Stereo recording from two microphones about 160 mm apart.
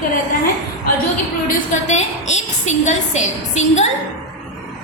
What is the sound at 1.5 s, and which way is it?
A woman's voice, 45° left (ahead or behind).